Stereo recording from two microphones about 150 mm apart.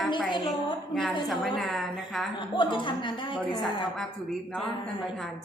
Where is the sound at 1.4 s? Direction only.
Centre (ahead or behind).